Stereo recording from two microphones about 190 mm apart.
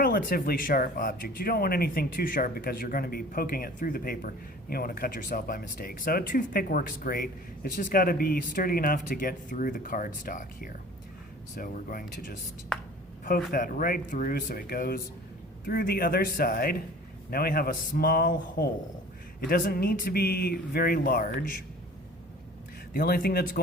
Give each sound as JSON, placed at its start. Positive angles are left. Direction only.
{"t": 0.0, "sound": "speech", "side_deg": 50}
{"t": 13.2, "sound": "speech", "side_deg": 50}
{"t": 22.9, "sound": "speech", "side_deg": 50}